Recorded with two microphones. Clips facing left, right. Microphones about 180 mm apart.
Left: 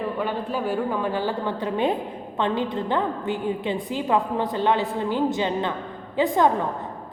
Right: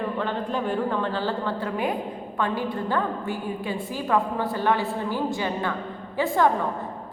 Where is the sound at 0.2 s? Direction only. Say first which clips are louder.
Left 1 dB; 5° left (ahead or behind).